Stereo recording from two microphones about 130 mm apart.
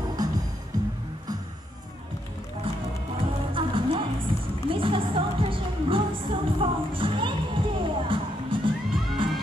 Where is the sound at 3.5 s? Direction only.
40° right (ahead or behind).